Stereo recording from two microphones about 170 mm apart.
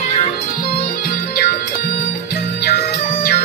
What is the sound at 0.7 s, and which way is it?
Music, 65° left (ahead or behind).